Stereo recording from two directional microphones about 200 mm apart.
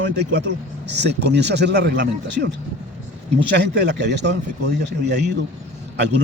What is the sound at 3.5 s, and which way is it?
A man's voice, 60° right (ahead or behind).